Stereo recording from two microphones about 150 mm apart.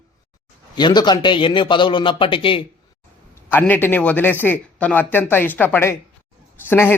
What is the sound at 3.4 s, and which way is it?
Speech, 15° left (ahead or behind).